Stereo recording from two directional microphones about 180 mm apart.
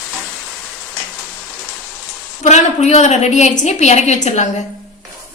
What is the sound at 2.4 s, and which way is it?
A woman's voice, 40° left (ahead or behind).